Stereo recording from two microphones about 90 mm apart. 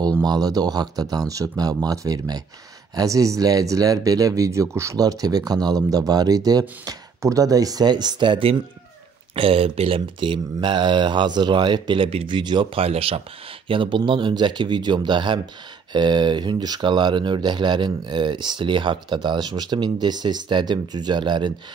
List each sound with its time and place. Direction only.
0.2 s speech: 45° right (ahead or behind); by 8.6 s 75° right (ahead or behind)
9.3 s speech: 90° right
13.7 s speech: 65° right (ahead or behind)